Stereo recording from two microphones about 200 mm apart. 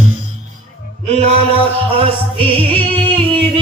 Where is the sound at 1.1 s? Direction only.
30° right (ahead or behind).